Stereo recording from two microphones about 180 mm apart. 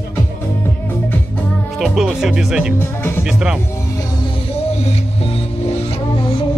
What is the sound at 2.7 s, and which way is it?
Speech, 10° left (ahead or behind).